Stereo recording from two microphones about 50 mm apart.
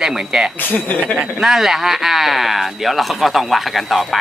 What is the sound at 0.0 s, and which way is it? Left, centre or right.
Speech, centre.